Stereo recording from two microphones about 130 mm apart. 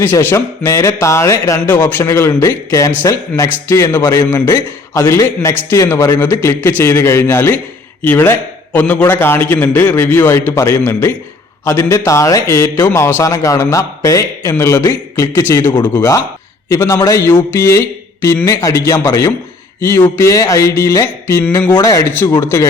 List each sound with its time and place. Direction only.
0.0 s a man's voice: 20° left (ahead or behind)
21.8 s a man's voice: 25° left (ahead or behind)
22.0 s a man's voice: 15° left (ahead or behind)